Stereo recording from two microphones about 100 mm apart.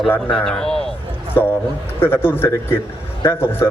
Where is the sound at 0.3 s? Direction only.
5° left (ahead or behind).